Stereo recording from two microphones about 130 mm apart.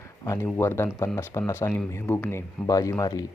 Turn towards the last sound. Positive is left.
turn(degrees=30)  # may be behind; listen again after turning